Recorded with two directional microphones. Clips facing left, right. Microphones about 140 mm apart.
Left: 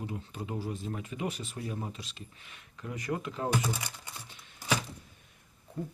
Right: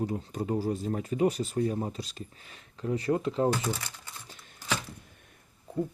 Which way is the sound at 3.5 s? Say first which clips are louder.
Right 2 dB; 15° left (ahead or behind).